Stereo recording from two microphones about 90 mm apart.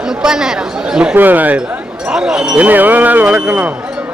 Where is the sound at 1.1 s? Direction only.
20° right (ahead or behind).